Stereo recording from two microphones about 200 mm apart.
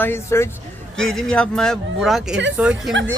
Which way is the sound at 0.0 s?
10° left (ahead or behind).